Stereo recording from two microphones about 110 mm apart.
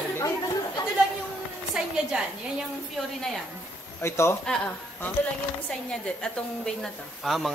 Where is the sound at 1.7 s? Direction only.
5° right (ahead or behind).